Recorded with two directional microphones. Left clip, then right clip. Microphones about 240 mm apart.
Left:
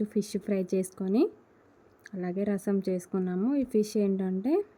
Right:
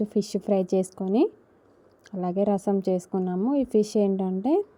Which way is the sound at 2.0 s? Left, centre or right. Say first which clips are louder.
Right 6 dB; right.